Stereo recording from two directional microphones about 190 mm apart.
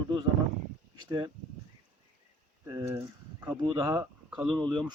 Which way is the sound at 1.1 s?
25° right (ahead or behind).